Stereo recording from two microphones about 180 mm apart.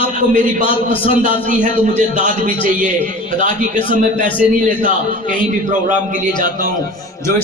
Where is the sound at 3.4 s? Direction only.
45° right (ahead or behind).